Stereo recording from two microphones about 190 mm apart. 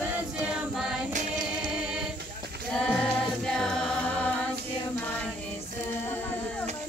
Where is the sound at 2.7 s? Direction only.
5° left (ahead or behind).